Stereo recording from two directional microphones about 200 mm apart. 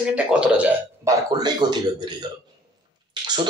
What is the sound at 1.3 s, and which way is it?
A man's voice, 20° right (ahead or behind).